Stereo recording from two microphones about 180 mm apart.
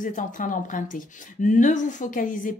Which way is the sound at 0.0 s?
45° left (ahead or behind).